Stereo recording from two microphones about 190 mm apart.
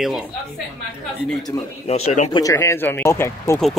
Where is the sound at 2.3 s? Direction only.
15° left (ahead or behind).